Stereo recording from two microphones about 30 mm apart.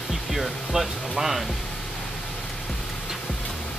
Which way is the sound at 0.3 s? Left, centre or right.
Centre.